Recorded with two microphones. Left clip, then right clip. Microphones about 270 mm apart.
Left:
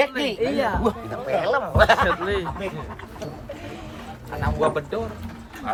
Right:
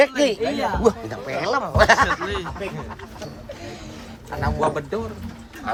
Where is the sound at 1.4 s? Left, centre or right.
Right.